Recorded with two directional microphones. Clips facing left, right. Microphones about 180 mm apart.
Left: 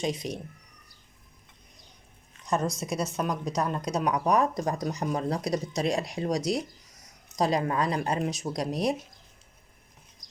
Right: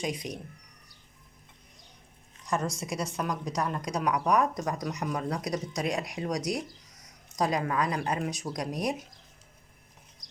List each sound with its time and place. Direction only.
0.0 s speech: 30° left (ahead or behind)
2.7 s speech: 20° left (ahead or behind)